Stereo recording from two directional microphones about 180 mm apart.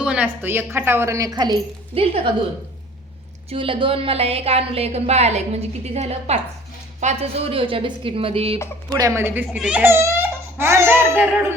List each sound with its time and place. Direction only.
0.0 s speech: 5° right (ahead or behind)
2.0 s a woman's voice: 30° right (ahead or behind)
3.5 s a woman's voice: 30° right (ahead or behind)
9.0 s speech: 15° right (ahead or behind)